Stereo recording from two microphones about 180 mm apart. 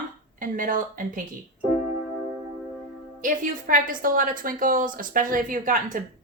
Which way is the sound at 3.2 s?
45° right (ahead or behind).